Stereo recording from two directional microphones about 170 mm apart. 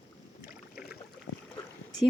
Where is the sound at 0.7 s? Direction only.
65° left (ahead or behind).